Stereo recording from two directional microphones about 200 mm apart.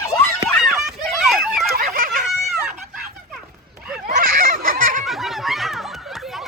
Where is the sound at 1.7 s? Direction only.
45° right (ahead or behind).